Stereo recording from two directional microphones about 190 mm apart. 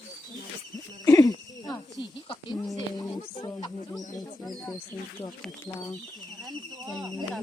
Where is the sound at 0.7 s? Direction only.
20° left (ahead or behind).